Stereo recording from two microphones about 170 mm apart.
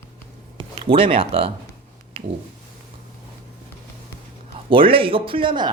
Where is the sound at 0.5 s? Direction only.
30° right (ahead or behind).